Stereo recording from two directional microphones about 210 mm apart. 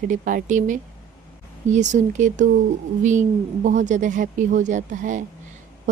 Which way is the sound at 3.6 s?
35° right (ahead or behind).